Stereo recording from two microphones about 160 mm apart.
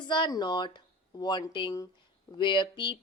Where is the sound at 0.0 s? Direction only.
30° left (ahead or behind).